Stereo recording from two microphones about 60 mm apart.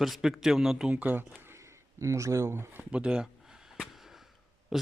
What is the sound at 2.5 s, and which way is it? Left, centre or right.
Speech, right.